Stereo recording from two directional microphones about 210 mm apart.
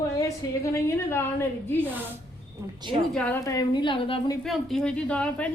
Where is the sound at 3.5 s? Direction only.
20° left (ahead or behind).